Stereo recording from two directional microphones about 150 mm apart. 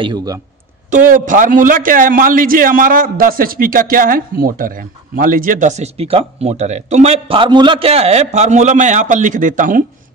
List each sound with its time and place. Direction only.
0.0 s a man's voice: 25° right (ahead or behind)
0.8 s a man's voice: 60° right (ahead or behind)